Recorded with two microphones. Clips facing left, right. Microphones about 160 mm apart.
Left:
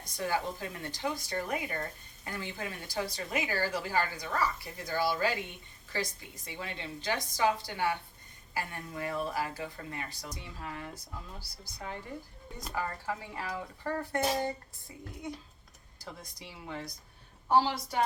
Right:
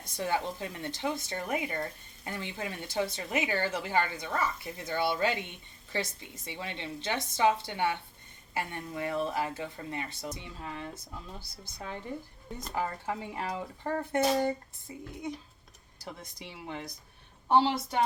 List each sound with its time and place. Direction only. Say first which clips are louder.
0.0 s speech: right 1 dB; 25° right (ahead or behind)
16.4 s speech: right 1 dB; 20° right (ahead or behind)